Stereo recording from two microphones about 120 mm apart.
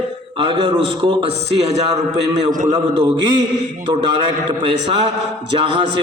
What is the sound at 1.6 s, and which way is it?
Speech, 65° right (ahead or behind).